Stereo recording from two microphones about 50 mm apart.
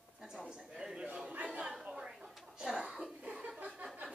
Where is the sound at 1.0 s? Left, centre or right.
Right.